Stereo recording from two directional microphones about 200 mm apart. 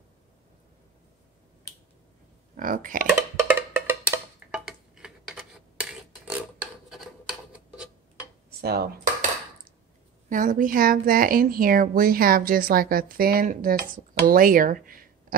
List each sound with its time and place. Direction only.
2.5 s speech: 40° right (ahead or behind)
3.2 s music: 10° right (ahead or behind)
6.9 s rub: 5° right (ahead or behind)
8.5 s dishes: 50° right (ahead or behind)
10.3 s a woman's voice: 40° right (ahead or behind)